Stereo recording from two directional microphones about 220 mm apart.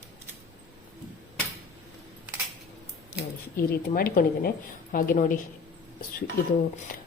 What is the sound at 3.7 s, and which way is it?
A woman's voice, 45° left (ahead or behind).